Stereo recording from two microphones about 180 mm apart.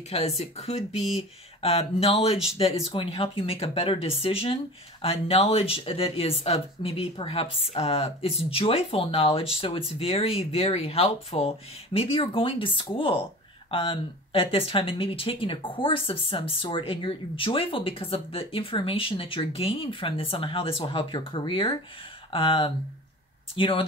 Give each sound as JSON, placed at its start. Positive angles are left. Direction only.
{"t": 0.4, "sound": "speech", "side_deg": 35}